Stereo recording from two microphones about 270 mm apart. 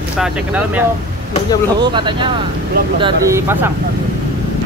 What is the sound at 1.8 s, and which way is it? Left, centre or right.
Speech, centre.